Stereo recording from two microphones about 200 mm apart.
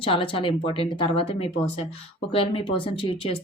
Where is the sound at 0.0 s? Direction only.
25° left (ahead or behind).